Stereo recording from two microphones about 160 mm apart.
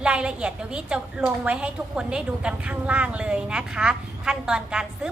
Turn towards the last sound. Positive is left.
turn(degrees=-5)  # may be behind; listen again after turning